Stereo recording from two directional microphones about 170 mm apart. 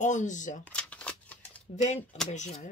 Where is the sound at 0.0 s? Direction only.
45° left (ahead or behind).